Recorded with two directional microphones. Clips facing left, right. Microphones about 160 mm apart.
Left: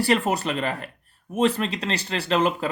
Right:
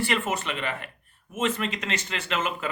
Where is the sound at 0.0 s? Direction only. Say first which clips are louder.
Left 5 dB; 35° left (ahead or behind).